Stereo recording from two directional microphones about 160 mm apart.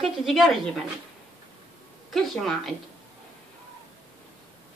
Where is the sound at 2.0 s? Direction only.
Centre (ahead or behind).